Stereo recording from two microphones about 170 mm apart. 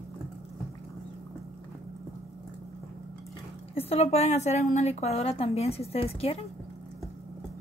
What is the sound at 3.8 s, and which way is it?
A woman's voice, 35° left (ahead or behind).